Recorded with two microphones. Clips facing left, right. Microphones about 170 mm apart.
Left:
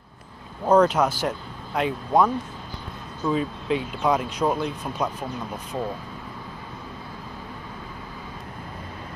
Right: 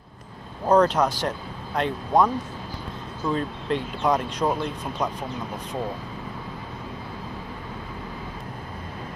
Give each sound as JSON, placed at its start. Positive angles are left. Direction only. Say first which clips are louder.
{"t": 0.7, "sound": "speech", "louder": "left 1 dB", "side_deg": 5}